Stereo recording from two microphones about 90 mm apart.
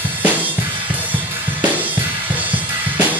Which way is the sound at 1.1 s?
20° right (ahead or behind).